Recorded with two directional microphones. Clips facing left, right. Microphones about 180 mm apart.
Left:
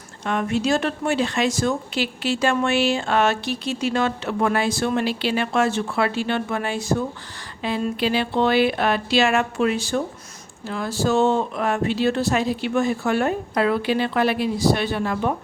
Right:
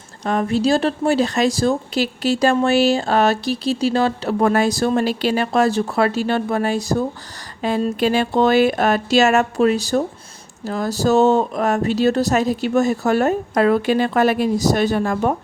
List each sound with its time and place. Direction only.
0.3 s speech: 35° right (ahead or behind)